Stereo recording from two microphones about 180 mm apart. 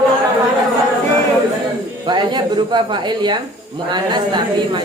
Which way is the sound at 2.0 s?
25° right (ahead or behind).